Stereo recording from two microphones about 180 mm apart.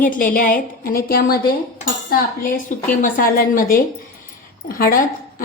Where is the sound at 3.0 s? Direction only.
50° left (ahead or behind).